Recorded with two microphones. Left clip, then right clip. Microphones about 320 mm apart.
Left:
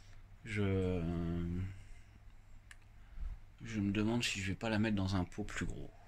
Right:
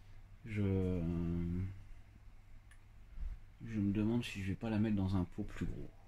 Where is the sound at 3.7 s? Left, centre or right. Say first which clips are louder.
Left 1 dB; left.